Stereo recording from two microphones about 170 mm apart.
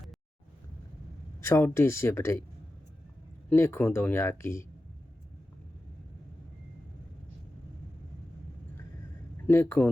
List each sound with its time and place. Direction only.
1.4 s speech: 15° left (ahead or behind)
3.5 s speech: 15° left (ahead or behind)
9.5 s speech: 15° left (ahead or behind)